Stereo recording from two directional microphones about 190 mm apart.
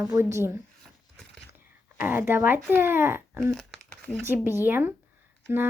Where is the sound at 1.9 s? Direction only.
10° right (ahead or behind).